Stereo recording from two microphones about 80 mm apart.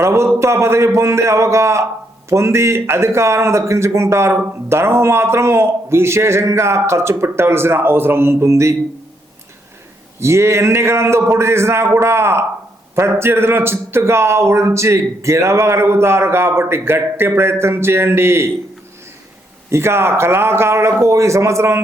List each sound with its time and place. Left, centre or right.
0.0 s speech: right
10.2 s speech: right
19.7 s speech: right